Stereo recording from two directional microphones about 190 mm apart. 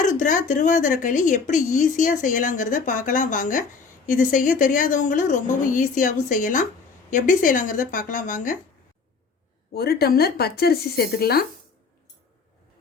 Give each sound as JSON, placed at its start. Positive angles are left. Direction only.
{"t": 0.0, "sound": "speech", "side_deg": 40}
{"t": 9.7, "sound": "speech", "side_deg": 55}